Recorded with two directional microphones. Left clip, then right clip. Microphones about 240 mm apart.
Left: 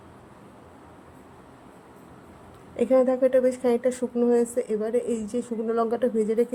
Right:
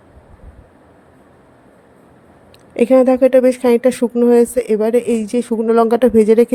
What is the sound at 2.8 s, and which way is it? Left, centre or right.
Speech, right.